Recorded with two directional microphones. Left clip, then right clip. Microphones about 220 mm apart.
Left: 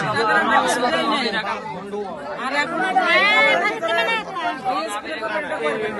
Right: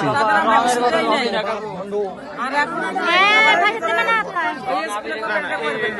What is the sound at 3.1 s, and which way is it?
Speech, 25° right (ahead or behind).